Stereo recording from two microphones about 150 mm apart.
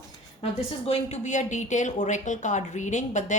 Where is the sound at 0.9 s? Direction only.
50° left (ahead or behind).